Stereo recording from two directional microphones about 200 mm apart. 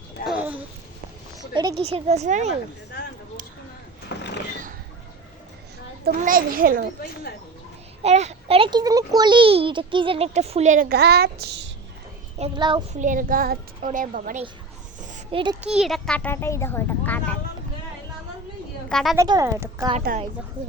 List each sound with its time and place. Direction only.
0.3 s a sound: 5° right (ahead or behind)
1.8 s speech: 30° right (ahead or behind)
4.1 s a sound: 60° left (ahead or behind)
6.2 s a woman's voice: 45° right (ahead or behind)
8.0 s a child's voice: 35° right (ahead or behind); by 11.7 s 60° right (ahead or behind)
12.4 s a child's voice: 25° right (ahead or behind)
12.9 s a woman's voice: 40° right (ahead or behind)
15.0 s a sound: 40° right (ahead or behind)
15.6 s a child's voice: 5° right (ahead or behind)
18.9 s a woman's voice: centre (ahead or behind)
19.1 s a woman's voice: 15° right (ahead or behind)